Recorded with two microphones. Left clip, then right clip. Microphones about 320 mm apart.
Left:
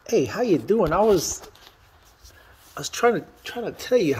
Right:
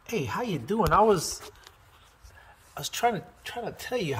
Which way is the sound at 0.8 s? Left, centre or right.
Right.